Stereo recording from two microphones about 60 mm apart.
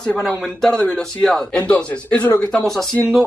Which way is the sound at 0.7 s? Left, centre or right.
Left.